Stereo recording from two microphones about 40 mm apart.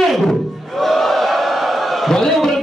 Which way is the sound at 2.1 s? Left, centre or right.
Centre.